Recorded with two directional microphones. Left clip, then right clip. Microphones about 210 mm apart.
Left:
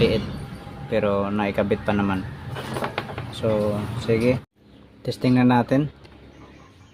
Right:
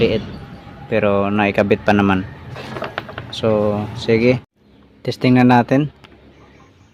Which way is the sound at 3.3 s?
45° right (ahead or behind).